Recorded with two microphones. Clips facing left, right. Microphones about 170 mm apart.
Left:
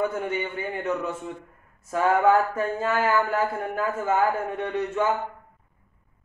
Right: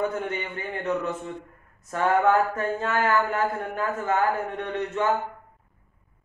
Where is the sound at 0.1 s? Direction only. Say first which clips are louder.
Left 2 dB; 5° left (ahead or behind).